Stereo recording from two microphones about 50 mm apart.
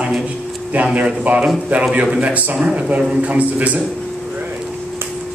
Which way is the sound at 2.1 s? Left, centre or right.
Right.